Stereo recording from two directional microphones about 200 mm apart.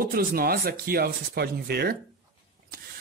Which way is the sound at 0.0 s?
50° right (ahead or behind).